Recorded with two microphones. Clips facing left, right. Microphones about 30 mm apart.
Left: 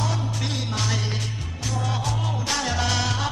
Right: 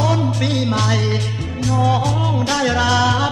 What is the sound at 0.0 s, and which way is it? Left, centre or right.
Music, right.